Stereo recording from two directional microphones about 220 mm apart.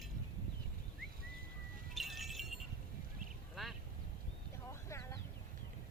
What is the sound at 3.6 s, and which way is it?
Quack, centre (ahead or behind).